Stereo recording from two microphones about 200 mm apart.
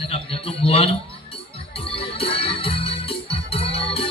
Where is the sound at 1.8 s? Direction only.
25° left (ahead or behind).